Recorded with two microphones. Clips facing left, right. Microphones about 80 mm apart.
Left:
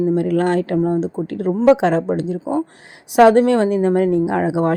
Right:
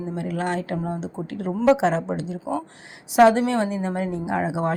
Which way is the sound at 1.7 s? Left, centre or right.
Left.